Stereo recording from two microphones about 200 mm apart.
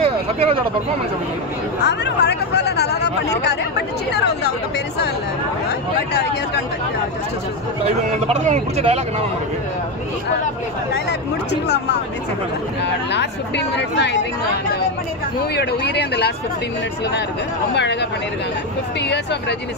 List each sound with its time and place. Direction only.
0.0 s a sound: 30° right (ahead or behind)
1.8 s speech: 55° left (ahead or behind)
5.9 s speech: 55° left (ahead or behind)
7.8 s speech: 30° right (ahead or behind)
11.6 s speech: 55° left (ahead or behind)
15.5 s speech: 55° left (ahead or behind)
18.9 s speech: 60° left (ahead or behind)